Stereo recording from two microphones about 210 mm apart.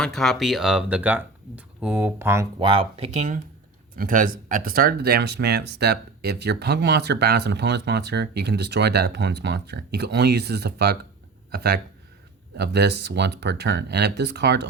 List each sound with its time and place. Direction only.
0.0 s speech: centre (ahead or behind); by 14.7 s 55° right (ahead or behind)